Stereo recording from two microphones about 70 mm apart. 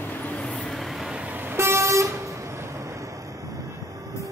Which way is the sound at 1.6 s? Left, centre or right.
Right.